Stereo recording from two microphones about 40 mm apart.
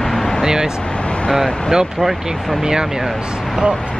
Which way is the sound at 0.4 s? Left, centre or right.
Centre.